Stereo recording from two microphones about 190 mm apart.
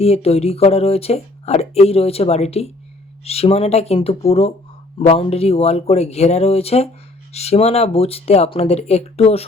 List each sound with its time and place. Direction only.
0.0 s speech: 35° left (ahead or behind)